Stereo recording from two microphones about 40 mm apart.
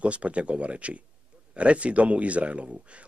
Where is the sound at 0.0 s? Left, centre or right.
Right.